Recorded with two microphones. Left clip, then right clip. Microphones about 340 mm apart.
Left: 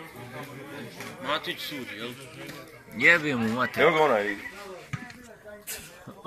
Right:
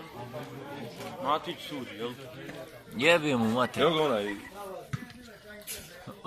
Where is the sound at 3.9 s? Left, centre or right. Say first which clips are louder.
Left 5 dB; left.